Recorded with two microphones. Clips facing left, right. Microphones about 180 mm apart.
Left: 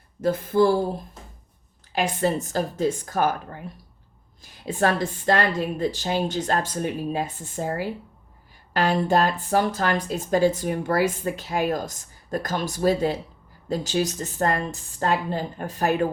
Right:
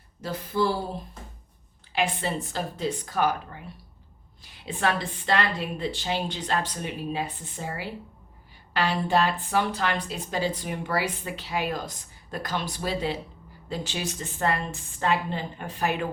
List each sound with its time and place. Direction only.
0.2 s a woman's voice: 50° left (ahead or behind)
1.9 s a woman's voice: 45° left (ahead or behind)